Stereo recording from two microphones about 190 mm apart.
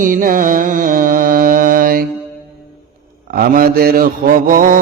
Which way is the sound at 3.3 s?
50° right (ahead or behind).